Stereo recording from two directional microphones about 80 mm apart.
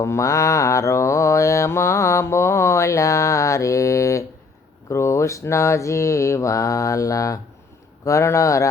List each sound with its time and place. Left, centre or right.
0.0 s mantra: left
8.0 s speech: left